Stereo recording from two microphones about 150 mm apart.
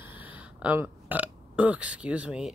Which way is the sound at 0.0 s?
10° right (ahead or behind).